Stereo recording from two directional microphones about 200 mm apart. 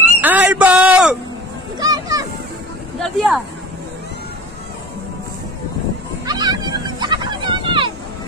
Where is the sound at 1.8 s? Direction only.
20° right (ahead or behind).